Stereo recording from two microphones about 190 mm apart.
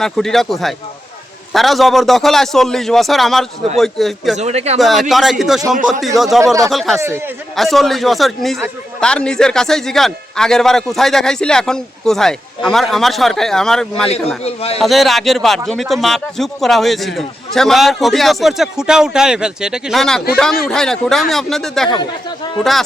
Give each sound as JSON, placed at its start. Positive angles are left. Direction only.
{"t": 0.0, "sound": "speech", "side_deg": 0}
{"t": 4.4, "sound": "speech", "side_deg": -35}
{"t": 4.8, "sound": "speech", "side_deg": 0}
{"t": 6.4, "sound": "speech", "side_deg": -15}
{"t": 6.7, "sound": "speech", "side_deg": 0}
{"t": 14.4, "sound": "a man's voice", "side_deg": 30}
{"t": 14.8, "sound": "speech", "side_deg": 0}